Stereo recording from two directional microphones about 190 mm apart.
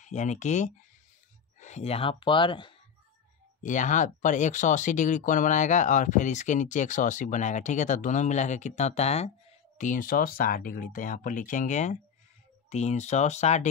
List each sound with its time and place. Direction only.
0.0 s speech: 40° left (ahead or behind)
3.6 s speech: 40° left (ahead or behind)